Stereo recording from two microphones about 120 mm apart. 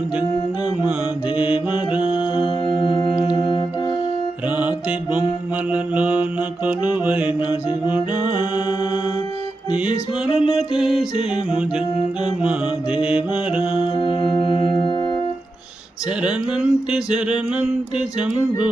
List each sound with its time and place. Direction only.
1.4 s mantra: 10° right (ahead or behind)
2.6 s singing bowl: 40° left (ahead or behind)
3.2 s music: 40° left (ahead or behind)
4.5 s music: 10° right (ahead or behind)
5.7 s a sound: 10° right (ahead or behind)
9.7 s music: 10° right (ahead or behind)
12.2 s a sound: 10° right (ahead or behind)
14.0 s music: 40° left (ahead or behind)
16.2 s a sound: 5° right (ahead or behind)